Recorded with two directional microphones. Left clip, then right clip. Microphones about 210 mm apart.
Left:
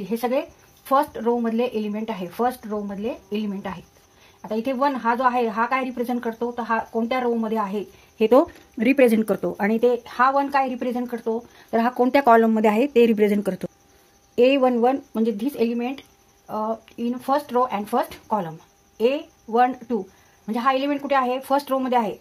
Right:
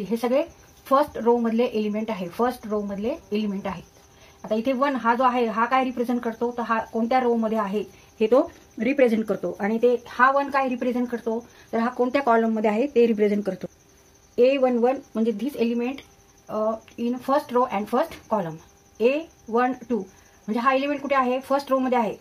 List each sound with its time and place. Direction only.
0.1 s a woman's voice: 35° left (ahead or behind)
8.3 s a woman's voice: 50° left (ahead or behind)